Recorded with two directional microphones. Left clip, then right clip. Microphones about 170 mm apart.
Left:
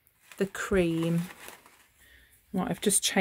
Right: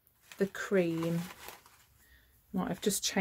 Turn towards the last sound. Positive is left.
turn(degrees=45)  # may be behind; listen again after turning